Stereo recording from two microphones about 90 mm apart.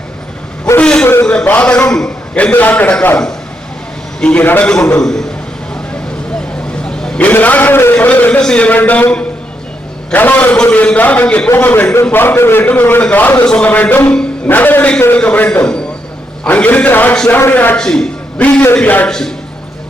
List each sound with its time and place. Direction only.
0.8 s vehicle: 10° left (ahead or behind)
1.0 s a sound: 20° left (ahead or behind)
1.9 s a man's voice: 10° left (ahead or behind)
4.2 s a man's voice: 15° left (ahead or behind)
7.0 s a man's voice: 15° left (ahead or behind)
17.7 s a man's voice: 5° left (ahead or behind)
18.6 s a man's voice: 20° left (ahead or behind)